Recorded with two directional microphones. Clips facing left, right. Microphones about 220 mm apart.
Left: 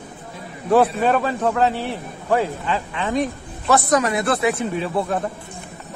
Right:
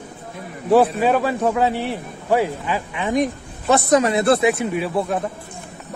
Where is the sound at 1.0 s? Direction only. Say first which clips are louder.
Right 1 dB; 10° right (ahead or behind); by 4.4 s 30° right (ahead or behind).